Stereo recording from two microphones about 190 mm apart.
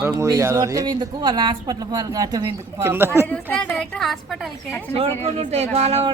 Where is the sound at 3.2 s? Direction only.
5° left (ahead or behind).